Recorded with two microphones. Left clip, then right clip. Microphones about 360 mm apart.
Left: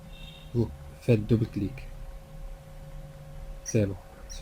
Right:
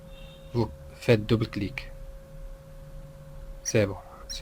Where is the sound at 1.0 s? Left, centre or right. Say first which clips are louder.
Right 3 dB; right.